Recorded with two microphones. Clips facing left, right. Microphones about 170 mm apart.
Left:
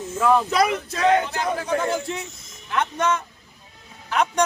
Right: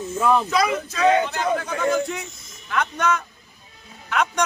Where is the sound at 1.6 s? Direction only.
30° left (ahead or behind).